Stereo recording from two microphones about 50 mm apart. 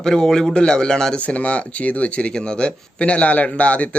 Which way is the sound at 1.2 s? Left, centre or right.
Left.